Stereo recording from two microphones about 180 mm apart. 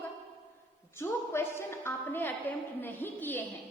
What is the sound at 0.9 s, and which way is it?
A woman's voice, 15° left (ahead or behind).